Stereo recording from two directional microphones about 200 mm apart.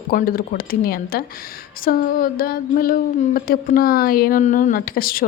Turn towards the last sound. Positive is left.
turn(degrees=45)  # may be behind; listen again after turning